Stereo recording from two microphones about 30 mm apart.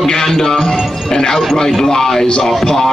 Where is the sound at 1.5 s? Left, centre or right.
Centre.